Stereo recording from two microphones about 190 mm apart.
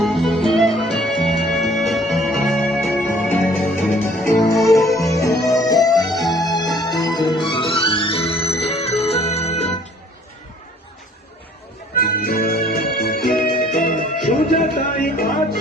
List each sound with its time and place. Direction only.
0.0 s music: centre (ahead or behind)
4.3 s music: 15° left (ahead or behind); by 9.7 s 35° left (ahead or behind)
11.9 s music: 50° left (ahead or behind)